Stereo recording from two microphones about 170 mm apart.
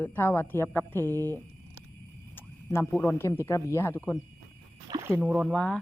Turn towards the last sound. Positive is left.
turn(degrees=10)  # may be behind; listen again after turning